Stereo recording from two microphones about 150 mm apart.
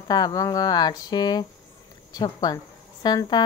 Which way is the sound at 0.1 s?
25° left (ahead or behind).